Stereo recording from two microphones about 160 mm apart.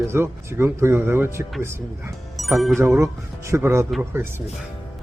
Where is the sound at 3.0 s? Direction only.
15° right (ahead or behind).